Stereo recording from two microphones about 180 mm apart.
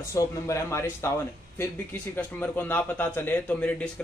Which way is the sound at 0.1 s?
15° left (ahead or behind).